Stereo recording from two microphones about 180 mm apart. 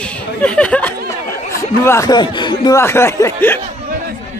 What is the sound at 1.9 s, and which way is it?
Speech, 20° left (ahead or behind).